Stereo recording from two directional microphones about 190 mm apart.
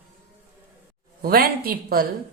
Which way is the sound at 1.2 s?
50° right (ahead or behind).